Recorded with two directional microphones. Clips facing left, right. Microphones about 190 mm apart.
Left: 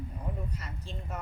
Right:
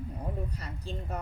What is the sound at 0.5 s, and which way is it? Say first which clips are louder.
Speech: right 3 dB; 35° right (ahead or behind).